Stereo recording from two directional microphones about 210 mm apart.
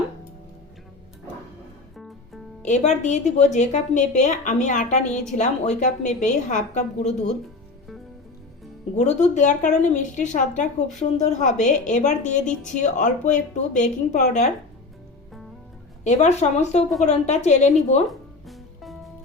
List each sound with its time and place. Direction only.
2.6 s speech: 35° left (ahead or behind)
9.0 s speech: 35° left (ahead or behind)
16.0 s speech: 35° left (ahead or behind)
18.1 s music: centre (ahead or behind)